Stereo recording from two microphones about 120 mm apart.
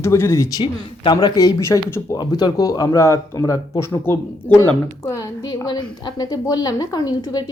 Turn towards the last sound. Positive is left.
turn(degrees=35)  # may be behind; listen again after turning